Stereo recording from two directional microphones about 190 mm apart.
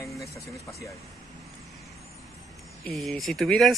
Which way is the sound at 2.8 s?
Centre (ahead or behind).